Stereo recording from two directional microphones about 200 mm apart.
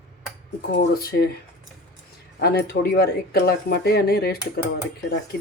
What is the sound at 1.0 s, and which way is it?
Speech, 50° left (ahead or behind).